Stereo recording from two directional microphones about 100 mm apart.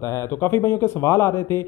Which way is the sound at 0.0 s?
30° left (ahead or behind).